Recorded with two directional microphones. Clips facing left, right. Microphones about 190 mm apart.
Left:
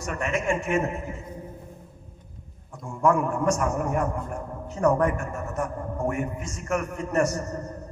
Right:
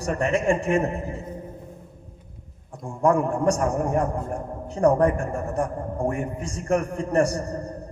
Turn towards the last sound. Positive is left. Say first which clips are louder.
# right 2 dB
turn(degrees=-35)  # may be behind; listen again after turning